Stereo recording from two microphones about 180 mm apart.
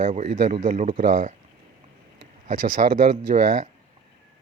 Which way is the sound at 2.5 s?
45° right (ahead or behind).